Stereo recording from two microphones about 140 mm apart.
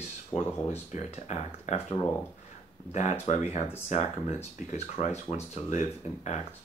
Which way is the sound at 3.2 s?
50° left (ahead or behind).